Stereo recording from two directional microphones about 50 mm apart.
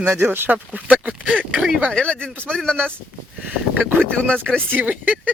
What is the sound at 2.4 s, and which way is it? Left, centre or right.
Speech, centre.